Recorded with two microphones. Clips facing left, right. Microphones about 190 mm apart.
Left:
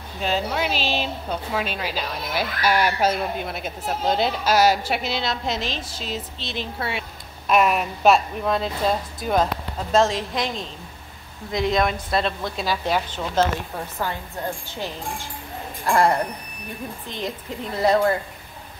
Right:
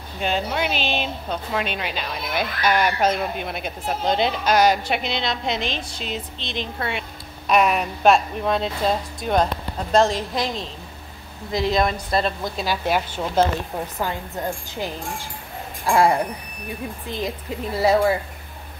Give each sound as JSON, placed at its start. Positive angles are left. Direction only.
{"t": 0.2, "sound": "a woman's voice", "side_deg": 0}
{"t": 17.7, "sound": "a woman's voice", "side_deg": -10}